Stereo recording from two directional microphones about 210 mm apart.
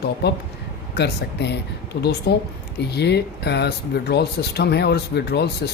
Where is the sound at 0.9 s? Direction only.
55° left (ahead or behind).